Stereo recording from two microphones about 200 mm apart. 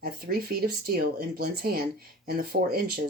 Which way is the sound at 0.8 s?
50° right (ahead or behind).